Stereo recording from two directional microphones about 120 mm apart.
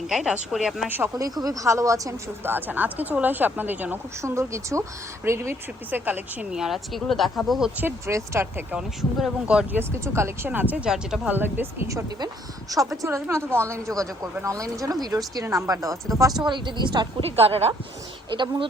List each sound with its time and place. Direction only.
0.1 s speech: 5° right (ahead or behind)
0.9 s speech: 15° right (ahead or behind)
1.1 s speech: 30° right (ahead or behind); by 7.7 s centre (ahead or behind)
7.8 s a woman's voice: 20° right (ahead or behind)
8.7 s speech: 5° right (ahead or behind)
9.9 s speech: 25° right (ahead or behind); by 11.3 s 5° right (ahead or behind)
11.3 s a woman's voice: 15° right (ahead or behind)
16.5 s a woman's voice: 40° right (ahead or behind)
17.2 s speech: 55° right (ahead or behind)
18.3 s a woman's voice: 40° right (ahead or behind)